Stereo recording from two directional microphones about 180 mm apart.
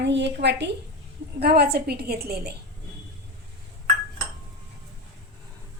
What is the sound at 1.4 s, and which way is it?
A woman's voice, 60° right (ahead or behind).